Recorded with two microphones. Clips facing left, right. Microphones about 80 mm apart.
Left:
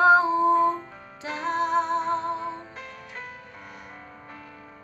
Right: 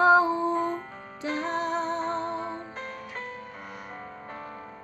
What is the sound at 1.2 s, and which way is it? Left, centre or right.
Music, centre.